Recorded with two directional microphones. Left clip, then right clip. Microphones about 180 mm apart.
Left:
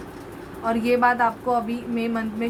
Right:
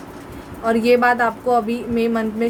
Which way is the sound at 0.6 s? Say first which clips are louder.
Right 5 dB; 40° right (ahead or behind).